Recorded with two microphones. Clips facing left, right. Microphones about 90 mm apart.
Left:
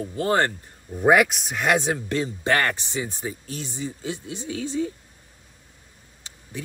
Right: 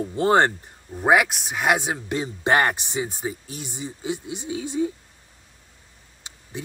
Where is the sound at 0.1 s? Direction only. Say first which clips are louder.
Right 4 dB; 20° right (ahead or behind).